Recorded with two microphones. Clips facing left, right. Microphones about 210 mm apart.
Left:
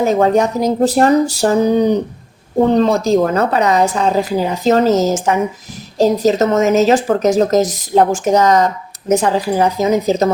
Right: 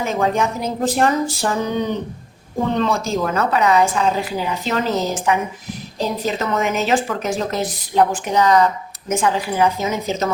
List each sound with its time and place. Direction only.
0.0 s a woman's voice: 40° left (ahead or behind)